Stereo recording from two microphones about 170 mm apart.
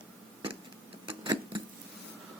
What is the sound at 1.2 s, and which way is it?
Tick-tock, 25° right (ahead or behind).